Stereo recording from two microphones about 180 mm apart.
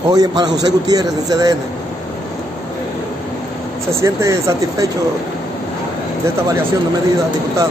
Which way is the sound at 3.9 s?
15° right (ahead or behind).